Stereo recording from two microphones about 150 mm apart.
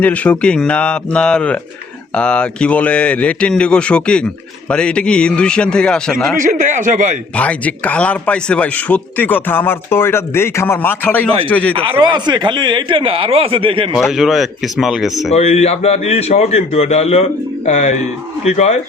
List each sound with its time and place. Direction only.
0.0 s a man's voice: 10° left (ahead or behind)
6.3 s a man's voice: 60° right (ahead or behind)
7.3 s a man's voice: 10° left (ahead or behind)
11.7 s speech: 35° right (ahead or behind)
14.0 s speech: centre (ahead or behind)
15.3 s a man's voice: 45° left (ahead or behind)